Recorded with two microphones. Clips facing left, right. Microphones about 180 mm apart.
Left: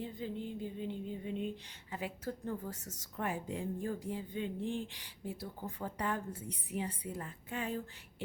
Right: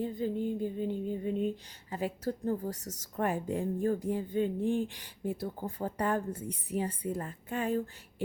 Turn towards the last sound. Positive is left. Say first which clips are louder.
# right 7 dB
turn(degrees=-50)  # may be behind; listen again after turning